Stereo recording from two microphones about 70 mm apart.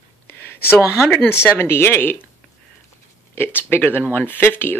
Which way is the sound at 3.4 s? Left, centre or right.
Left.